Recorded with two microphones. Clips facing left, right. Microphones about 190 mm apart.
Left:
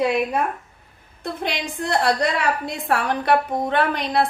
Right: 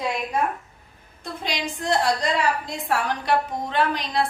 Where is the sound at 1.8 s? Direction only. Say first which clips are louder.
Left 2 dB; 60° left (ahead or behind).